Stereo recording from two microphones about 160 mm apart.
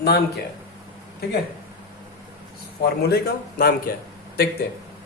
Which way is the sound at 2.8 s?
75° left (ahead or behind).